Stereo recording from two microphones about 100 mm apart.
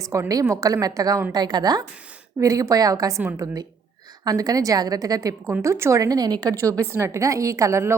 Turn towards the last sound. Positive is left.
turn(degrees=-25)  # may be behind; listen again after turning